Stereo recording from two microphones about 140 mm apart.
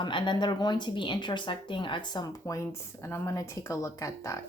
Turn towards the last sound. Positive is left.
turn(degrees=20)  # may be behind; listen again after turning